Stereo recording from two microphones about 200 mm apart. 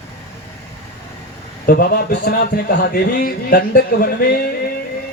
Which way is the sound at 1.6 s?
45° left (ahead or behind).